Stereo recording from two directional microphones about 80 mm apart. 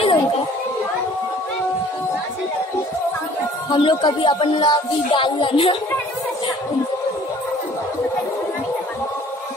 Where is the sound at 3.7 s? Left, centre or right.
Left.